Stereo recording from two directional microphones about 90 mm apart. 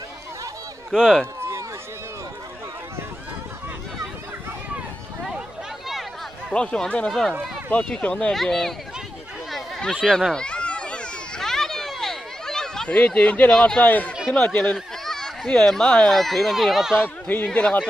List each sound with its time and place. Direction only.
0.9 s speech: 5° right (ahead or behind)
6.5 s speech: 10° left (ahead or behind)
9.5 s a sound: 5° left (ahead or behind)
10.0 s children playing: 5° left (ahead or behind)
14.3 s speech: 15° left (ahead or behind); by 17.0 s 5° right (ahead or behind)
17.0 s speech: 20° left (ahead or behind)